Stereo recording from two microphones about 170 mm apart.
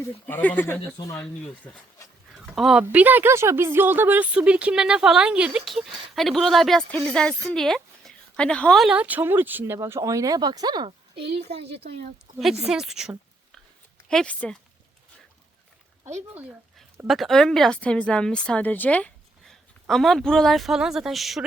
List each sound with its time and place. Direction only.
0.0 s speech: 10° left (ahead or behind)
1.2 s speech: 5° left (ahead or behind); by 10.9 s 25° right (ahead or behind)
11.1 s a woman's voice: 75° right (ahead or behind)
12.3 s speech: 50° right (ahead or behind)
12.6 s a woman's voice: 5° right (ahead or behind)
16.3 s a woman's voice: 10° right (ahead or behind)